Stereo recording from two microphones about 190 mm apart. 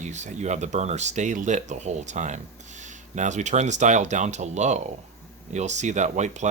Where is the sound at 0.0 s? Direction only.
40° right (ahead or behind).